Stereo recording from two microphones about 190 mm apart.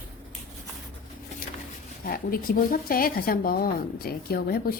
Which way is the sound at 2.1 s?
50° left (ahead or behind).